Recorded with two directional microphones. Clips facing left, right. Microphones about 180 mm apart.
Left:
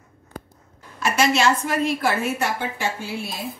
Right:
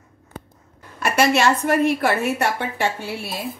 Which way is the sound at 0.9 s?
60° right (ahead or behind).